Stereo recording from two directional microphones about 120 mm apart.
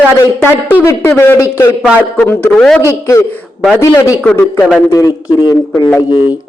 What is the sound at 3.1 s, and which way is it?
A man's voice, 25° left (ahead or behind).